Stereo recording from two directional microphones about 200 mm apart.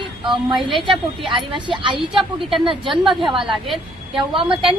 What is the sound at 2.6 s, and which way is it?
Speech, 25° right (ahead or behind).